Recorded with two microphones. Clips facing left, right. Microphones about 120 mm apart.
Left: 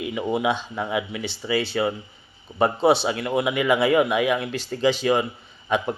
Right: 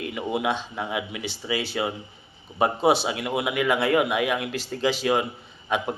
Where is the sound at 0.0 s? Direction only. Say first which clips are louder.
Left 3 dB; centre (ahead or behind).